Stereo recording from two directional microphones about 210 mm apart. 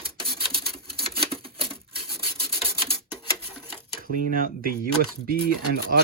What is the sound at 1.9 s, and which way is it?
Rub, 25° right (ahead or behind).